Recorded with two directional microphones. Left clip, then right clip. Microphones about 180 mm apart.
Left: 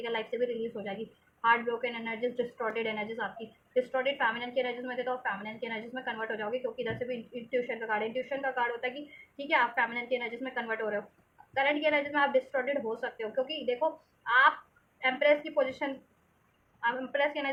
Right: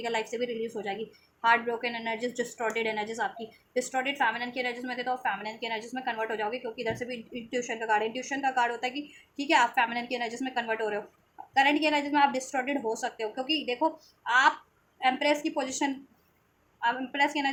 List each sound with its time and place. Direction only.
0.0 s a woman's voice: 45° right (ahead or behind)
9.7 s a woman's voice: 45° right (ahead or behind)